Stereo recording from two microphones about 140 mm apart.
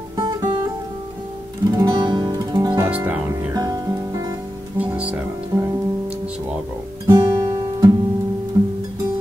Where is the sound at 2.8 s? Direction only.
15° right (ahead or behind).